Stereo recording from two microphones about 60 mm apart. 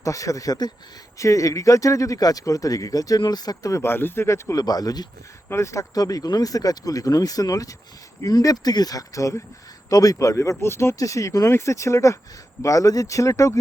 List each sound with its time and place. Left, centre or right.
0.0 s speech: left
1.2 s speech: left
3.8 s speech: left
4.5 s speech: left
5.5 s speech: left
5.9 s speech: left
8.2 s speech: left
9.9 s speech: left
10.6 s speech: left
10.9 s speech: left
11.5 s speech: left
12.6 s speech: left